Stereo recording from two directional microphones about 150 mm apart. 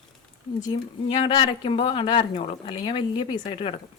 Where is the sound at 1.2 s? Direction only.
35° left (ahead or behind).